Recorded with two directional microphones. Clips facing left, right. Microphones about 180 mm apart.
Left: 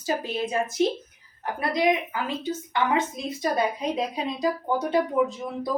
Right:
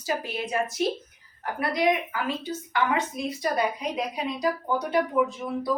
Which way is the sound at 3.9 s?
25° left (ahead or behind).